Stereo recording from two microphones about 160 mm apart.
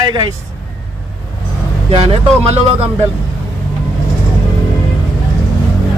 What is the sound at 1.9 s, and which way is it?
Speech, 40° right (ahead or behind).